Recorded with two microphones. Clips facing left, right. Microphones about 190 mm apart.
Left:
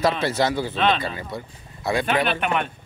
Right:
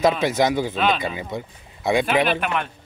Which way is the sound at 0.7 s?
5° right (ahead or behind).